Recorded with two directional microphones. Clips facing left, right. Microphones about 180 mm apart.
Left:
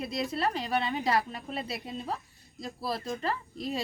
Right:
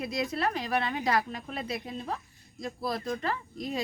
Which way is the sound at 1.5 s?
30° left (ahead or behind).